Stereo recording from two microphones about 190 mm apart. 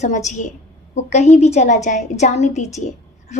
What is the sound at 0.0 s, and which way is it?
Speech, 40° left (ahead or behind).